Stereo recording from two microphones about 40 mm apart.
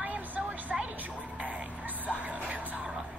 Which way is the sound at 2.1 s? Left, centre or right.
Right.